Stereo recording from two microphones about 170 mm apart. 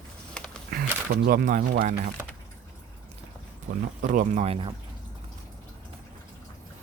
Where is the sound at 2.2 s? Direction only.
10° right (ahead or behind).